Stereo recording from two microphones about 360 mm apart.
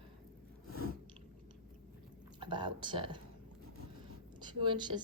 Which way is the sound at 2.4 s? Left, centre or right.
Centre.